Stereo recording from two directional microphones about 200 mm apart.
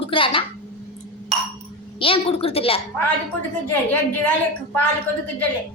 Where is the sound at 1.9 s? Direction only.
25° left (ahead or behind).